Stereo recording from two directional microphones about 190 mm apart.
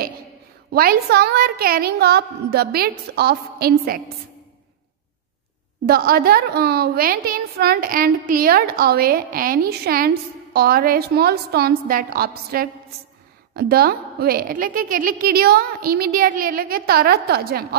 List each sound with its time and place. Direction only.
0.7 s a woman's voice: 55° right (ahead or behind)
5.9 s a woman's voice: 55° right (ahead or behind)